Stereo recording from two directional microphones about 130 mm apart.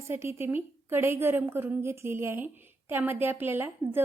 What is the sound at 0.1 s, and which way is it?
A woman's voice, 20° right (ahead or behind).